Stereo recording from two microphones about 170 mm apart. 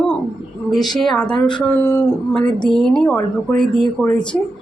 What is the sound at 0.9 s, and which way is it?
A woman's voice, centre (ahead or behind).